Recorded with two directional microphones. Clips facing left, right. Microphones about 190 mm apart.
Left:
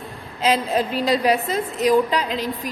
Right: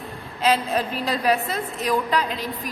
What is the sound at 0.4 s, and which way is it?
A woman's voice, 20° left (ahead or behind).